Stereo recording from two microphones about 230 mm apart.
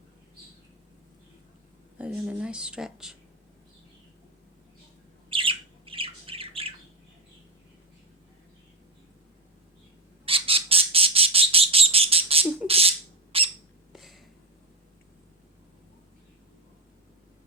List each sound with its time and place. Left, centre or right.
2.0 s speech: centre
5.3 s bird: right
10.2 s bird: right
13.9 s a sound: centre